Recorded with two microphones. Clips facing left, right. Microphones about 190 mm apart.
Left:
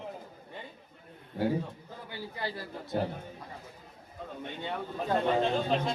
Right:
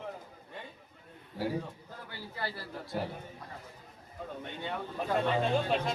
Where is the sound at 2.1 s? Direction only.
20° left (ahead or behind).